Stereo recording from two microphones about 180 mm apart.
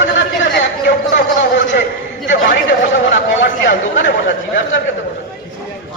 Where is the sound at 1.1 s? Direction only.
90° left.